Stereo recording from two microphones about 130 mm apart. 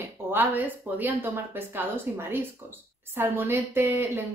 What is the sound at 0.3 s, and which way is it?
A woman's voice, 15° right (ahead or behind).